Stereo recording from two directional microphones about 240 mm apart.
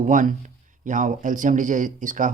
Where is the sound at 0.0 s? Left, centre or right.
Right.